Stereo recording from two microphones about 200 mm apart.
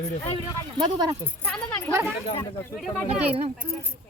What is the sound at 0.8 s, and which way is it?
Speech, 20° right (ahead or behind).